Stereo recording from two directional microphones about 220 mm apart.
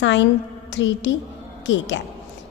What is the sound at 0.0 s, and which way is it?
A woman's voice, 55° left (ahead or behind).